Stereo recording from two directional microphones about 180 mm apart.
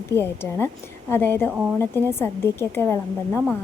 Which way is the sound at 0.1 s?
15° left (ahead or behind).